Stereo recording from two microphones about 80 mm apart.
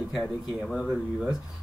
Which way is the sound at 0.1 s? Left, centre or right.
Centre.